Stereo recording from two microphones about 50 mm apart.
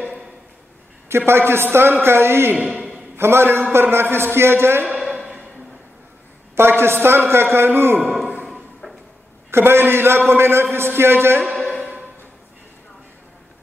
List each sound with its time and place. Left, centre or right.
1.0 s a man's voice: right
4.9 s a sound: centre
6.5 s a man's voice: right
9.5 s a man's voice: right